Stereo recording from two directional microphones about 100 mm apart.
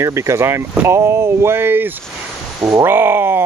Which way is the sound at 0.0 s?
30° right (ahead or behind).